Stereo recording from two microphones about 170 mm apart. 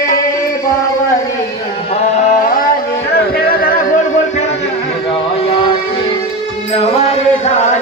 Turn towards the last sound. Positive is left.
turn(degrees=40)  # may be behind; listen again after turning